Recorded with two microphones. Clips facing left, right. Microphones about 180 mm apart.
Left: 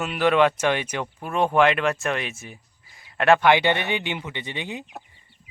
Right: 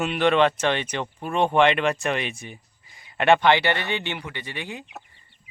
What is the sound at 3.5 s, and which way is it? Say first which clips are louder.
Speech: left 2 dB; 15° left (ahead or behind).